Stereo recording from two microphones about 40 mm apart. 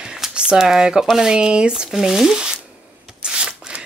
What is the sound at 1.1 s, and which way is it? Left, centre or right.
Speech, centre.